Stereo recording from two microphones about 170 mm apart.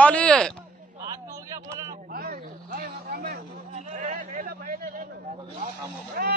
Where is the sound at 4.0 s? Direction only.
45° right (ahead or behind).